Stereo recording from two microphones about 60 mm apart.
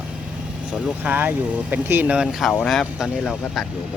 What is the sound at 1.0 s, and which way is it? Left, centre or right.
Speech, right.